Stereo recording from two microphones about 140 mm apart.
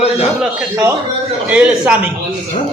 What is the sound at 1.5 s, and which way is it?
Speech, 5° right (ahead or behind).